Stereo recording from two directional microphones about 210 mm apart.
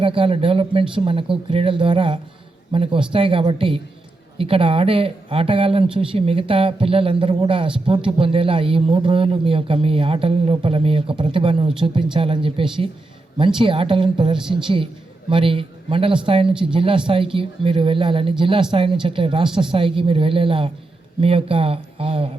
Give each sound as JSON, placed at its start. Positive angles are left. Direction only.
{"t": 0.0, "sound": "speech", "side_deg": -25}